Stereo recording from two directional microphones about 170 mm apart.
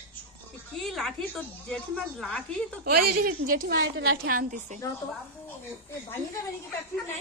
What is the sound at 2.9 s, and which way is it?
A woman's voice, 55° right (ahead or behind).